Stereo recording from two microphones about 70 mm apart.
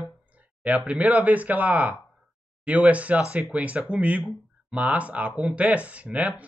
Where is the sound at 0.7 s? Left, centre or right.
Right.